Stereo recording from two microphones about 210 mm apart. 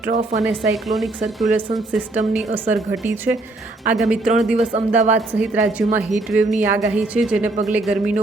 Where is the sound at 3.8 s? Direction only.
5° right (ahead or behind).